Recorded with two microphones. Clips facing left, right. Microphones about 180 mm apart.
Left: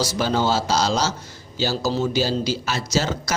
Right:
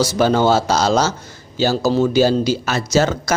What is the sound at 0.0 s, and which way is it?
A man's voice, 55° right (ahead or behind).